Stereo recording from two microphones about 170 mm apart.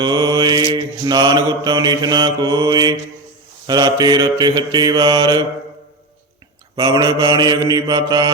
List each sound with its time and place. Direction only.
0.0 s mantra: 25° right (ahead or behind)
6.7 s mantra: 20° right (ahead or behind)